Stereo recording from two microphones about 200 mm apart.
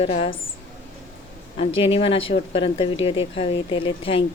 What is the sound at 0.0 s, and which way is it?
Speech, 30° left (ahead or behind).